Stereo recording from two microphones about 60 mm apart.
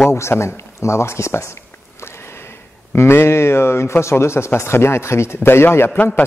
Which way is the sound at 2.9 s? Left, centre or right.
Left.